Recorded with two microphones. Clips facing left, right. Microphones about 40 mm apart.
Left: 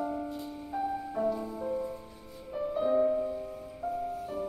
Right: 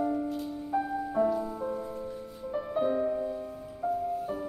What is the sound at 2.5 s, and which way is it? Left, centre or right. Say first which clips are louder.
Music: even; centre.